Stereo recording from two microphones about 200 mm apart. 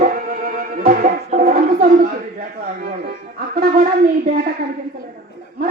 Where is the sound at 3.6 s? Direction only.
45° right (ahead or behind).